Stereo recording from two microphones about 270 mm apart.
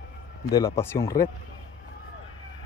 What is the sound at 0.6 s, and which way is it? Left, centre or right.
Speech, centre.